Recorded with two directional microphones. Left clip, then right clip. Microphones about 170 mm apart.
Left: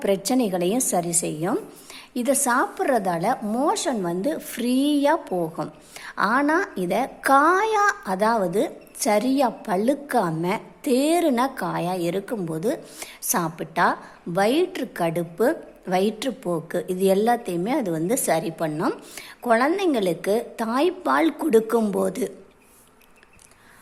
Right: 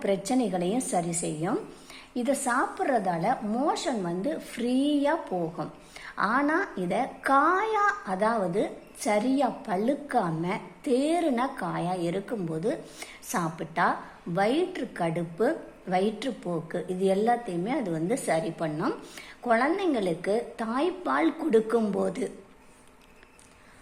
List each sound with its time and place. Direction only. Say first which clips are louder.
0.0 s a woman's voice: left 5 dB; 25° left (ahead or behind)